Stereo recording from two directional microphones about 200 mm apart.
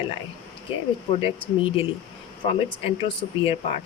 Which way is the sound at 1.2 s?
30° left (ahead or behind).